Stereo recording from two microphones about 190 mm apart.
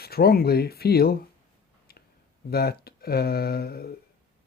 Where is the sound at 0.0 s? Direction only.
55° left (ahead or behind).